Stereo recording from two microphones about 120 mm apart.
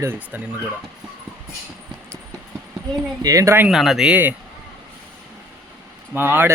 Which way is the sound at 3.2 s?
25° right (ahead or behind).